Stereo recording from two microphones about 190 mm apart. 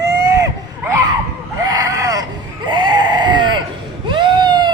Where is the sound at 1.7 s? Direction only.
20° right (ahead or behind).